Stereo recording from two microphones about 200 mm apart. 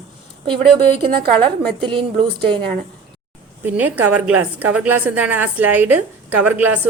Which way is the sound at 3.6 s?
10° right (ahead or behind).